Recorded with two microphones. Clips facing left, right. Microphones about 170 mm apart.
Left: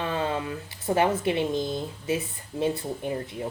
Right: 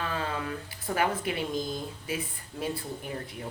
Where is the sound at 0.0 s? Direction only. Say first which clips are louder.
Left 5 dB; 25° left (ahead or behind).